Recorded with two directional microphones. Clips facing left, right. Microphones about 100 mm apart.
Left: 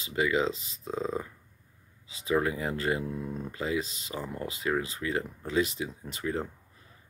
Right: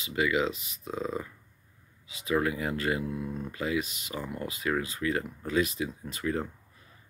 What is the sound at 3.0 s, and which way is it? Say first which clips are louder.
Speech: right 1 dB; 5° right (ahead or behind).